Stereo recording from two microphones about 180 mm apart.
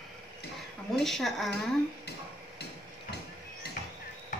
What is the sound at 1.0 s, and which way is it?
Speech, centre (ahead or behind).